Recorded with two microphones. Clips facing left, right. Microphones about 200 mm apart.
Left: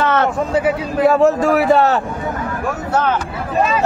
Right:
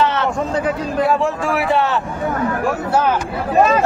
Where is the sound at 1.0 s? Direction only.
40° left (ahead or behind).